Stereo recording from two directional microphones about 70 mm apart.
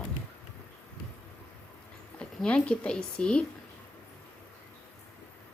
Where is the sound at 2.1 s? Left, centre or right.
Centre.